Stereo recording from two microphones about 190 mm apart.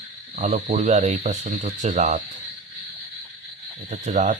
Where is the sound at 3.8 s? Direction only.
40° right (ahead or behind).